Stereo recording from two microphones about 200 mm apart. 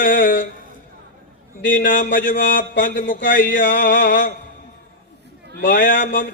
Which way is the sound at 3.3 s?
40° left (ahead or behind).